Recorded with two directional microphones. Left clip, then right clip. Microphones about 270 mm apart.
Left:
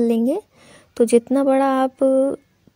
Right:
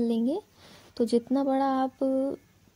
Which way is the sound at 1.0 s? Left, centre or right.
Left.